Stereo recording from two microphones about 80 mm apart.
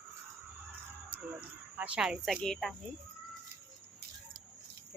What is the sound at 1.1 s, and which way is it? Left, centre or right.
Speech, right.